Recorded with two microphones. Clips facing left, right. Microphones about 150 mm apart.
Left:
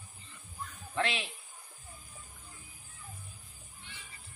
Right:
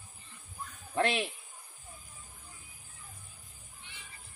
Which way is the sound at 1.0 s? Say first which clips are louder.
Right 4 dB; 50° right (ahead or behind).